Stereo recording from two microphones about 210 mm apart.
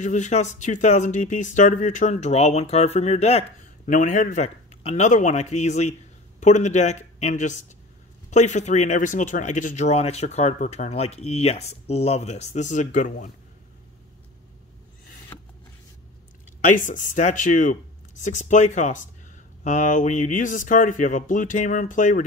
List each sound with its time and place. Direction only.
0.0 s speech: 35° left (ahead or behind)
16.6 s speech: 40° left (ahead or behind)